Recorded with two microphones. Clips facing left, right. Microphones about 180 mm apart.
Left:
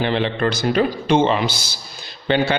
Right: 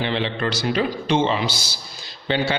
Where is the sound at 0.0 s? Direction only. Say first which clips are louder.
Left 4 dB; 50° left (ahead or behind).